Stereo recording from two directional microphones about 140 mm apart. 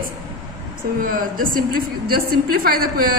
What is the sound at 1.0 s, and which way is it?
A woman's voice, 80° right.